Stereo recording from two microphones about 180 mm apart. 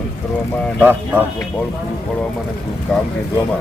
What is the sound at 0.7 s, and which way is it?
Speech, 10° right (ahead or behind).